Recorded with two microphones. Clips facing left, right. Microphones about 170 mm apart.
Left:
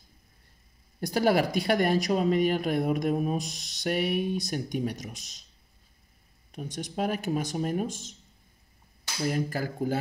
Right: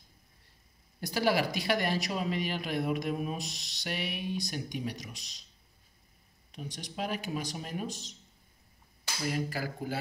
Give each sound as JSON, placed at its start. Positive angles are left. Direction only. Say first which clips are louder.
{"t": 1.0, "sound": "a woman's voice", "louder": "left 5 dB", "side_deg": 50}
{"t": 6.5, "sound": "a woman's voice", "louder": "left 6 dB", "side_deg": 50}
{"t": 9.3, "sound": "a woman's voice", "louder": "left 3 dB", "side_deg": 45}